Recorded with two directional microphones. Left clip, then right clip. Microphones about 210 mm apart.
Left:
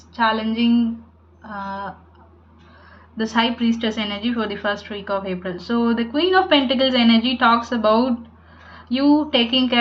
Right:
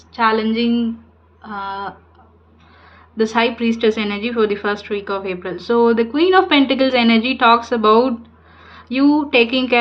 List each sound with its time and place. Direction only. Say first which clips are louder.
0.1 s a woman's voice: right 4 dB; 50° right (ahead or behind)
3.2 s a woman's voice: right 4 dB; 55° right (ahead or behind)